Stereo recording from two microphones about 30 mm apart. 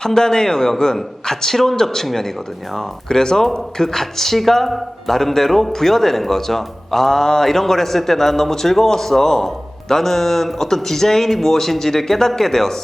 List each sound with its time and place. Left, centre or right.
0.0 s speech: left
3.1 s speech: left